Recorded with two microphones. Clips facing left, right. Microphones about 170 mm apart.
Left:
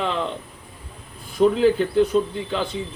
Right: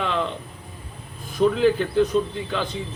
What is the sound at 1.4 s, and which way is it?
Speech, 25° left (ahead or behind).